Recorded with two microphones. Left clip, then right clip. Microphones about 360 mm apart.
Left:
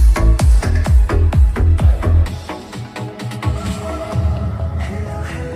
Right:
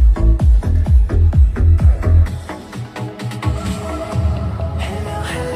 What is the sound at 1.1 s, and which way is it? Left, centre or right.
Music, left.